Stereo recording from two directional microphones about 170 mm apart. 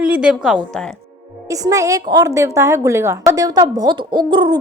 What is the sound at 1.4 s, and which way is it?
A woman's voice, 20° right (ahead or behind).